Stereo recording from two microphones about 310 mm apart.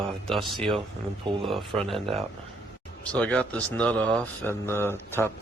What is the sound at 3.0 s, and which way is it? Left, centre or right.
Speech, centre.